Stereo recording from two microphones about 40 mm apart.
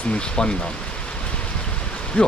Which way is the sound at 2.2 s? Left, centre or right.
Left.